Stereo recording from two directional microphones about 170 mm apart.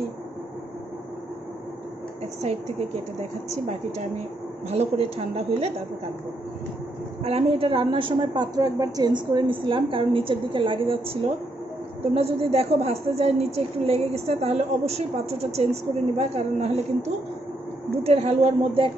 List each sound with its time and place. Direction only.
3.2 s a woman's voice: 40° right (ahead or behind)
7.2 s a woman's voice: 35° right (ahead or behind)
12.1 s a woman's voice: 35° right (ahead or behind)
18.0 s a woman's voice: 35° right (ahead or behind)